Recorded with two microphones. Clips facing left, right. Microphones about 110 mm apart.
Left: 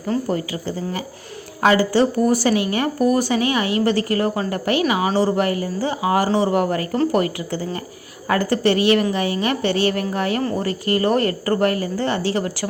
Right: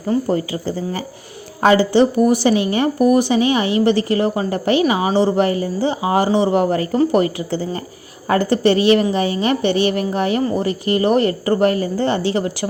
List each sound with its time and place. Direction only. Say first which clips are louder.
0.1 s speech: right 4 dB; 25° right (ahead or behind)